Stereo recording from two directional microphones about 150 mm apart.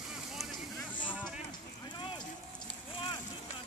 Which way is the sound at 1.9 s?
30° left (ahead or behind).